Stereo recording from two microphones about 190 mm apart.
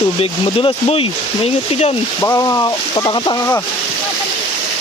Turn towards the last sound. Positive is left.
turn(degrees=20)  # may be behind; listen again after turning